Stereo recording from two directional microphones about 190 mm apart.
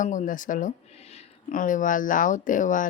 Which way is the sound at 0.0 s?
40° left (ahead or behind).